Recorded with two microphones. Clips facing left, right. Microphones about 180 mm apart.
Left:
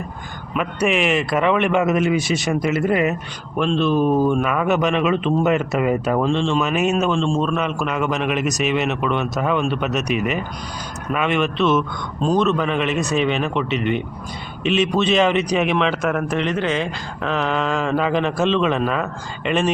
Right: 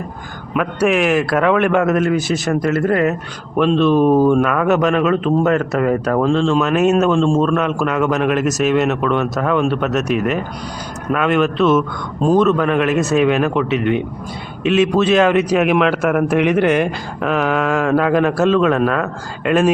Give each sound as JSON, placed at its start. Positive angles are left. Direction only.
{"t": 0.5, "sound": "a man's voice", "side_deg": 0}
{"t": 3.9, "sound": "speech", "side_deg": -35}
{"t": 4.3, "sound": "a man's voice", "side_deg": 0}